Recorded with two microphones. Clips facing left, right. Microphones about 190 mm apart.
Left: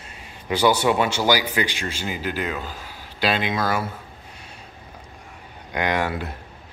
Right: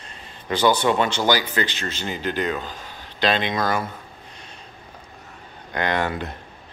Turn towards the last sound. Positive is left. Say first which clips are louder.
# even
turn(degrees=10)  # may be behind; listen again after turning